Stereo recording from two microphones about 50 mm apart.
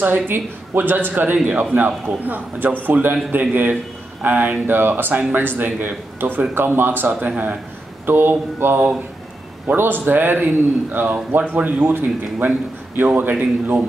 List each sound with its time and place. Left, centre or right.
0.0 s a man's voice: right
7.1 s a man's voice: right
8.1 s speech: right
10.0 s a man's voice: right